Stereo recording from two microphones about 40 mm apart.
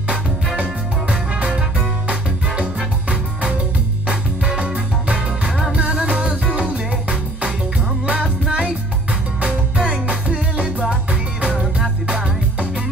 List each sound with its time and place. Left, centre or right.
0.6 s music: right
4.6 s music: right
8.1 s music: right